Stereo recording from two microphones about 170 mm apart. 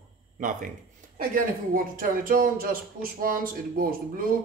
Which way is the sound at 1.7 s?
55° right (ahead or behind).